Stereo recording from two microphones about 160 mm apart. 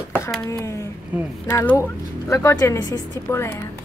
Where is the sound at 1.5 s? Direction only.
15° left (ahead or behind).